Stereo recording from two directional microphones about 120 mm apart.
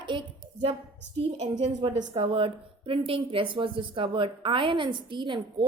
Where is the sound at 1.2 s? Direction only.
65° right (ahead or behind).